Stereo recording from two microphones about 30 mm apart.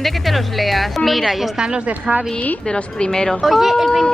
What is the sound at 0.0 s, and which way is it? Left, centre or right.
A woman's voice, centre.